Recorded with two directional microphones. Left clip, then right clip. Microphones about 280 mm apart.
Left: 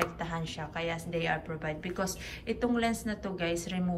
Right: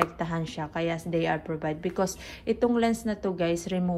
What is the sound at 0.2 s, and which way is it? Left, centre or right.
Speech, centre.